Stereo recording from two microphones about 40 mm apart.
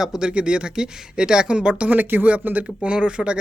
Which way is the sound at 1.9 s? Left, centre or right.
Right.